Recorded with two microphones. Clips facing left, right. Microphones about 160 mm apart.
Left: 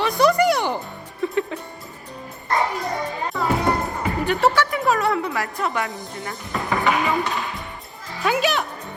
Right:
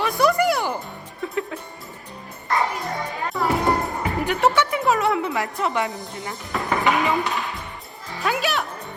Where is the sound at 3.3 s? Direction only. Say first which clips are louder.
Right 1 dB; centre (ahead or behind).